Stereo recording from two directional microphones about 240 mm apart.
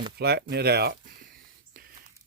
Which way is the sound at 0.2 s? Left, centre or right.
Right.